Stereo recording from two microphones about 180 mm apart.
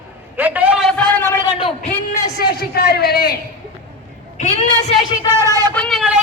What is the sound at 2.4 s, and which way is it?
Speech, 60° left (ahead or behind).